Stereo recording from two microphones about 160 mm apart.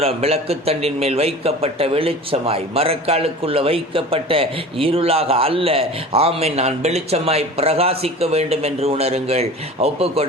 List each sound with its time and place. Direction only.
0.0 s a man's voice: 40° right (ahead or behind)